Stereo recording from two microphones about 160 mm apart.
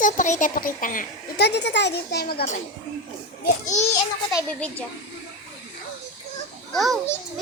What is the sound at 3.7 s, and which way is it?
Speech, 45° left (ahead or behind).